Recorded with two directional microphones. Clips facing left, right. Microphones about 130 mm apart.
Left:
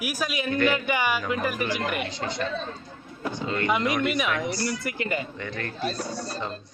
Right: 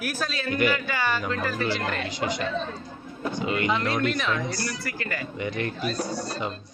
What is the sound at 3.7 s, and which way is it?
Speech, 15° left (ahead or behind).